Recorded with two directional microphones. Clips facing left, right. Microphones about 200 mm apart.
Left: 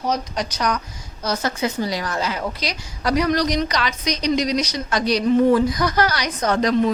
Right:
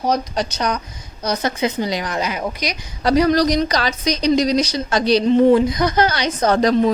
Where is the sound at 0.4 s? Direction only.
25° right (ahead or behind).